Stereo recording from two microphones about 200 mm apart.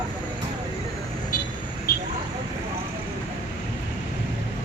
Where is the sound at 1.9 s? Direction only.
50° left (ahead or behind).